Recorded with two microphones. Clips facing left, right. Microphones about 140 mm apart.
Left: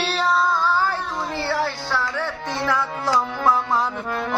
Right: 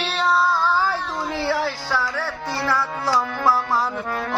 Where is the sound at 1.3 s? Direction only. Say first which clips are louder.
Right 2 dB; 5° right (ahead or behind).